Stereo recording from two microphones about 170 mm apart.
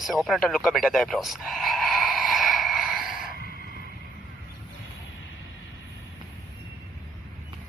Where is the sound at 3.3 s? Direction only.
60° left (ahead or behind).